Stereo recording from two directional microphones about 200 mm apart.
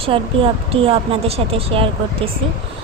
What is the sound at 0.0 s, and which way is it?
Speech, 25° right (ahead or behind).